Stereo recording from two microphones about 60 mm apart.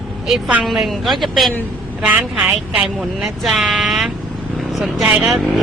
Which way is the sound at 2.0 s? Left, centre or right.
Centre.